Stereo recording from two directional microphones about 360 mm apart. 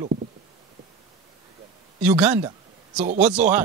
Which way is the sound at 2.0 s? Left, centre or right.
Centre.